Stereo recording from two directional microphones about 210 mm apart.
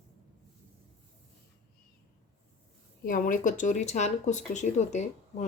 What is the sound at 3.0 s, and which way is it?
Speech, 40° left (ahead or behind).